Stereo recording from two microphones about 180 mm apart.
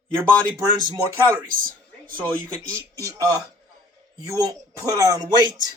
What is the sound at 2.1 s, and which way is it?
Speech, 25° right (ahead or behind).